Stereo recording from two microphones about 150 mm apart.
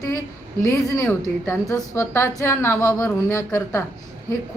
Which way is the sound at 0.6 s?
20° left (ahead or behind).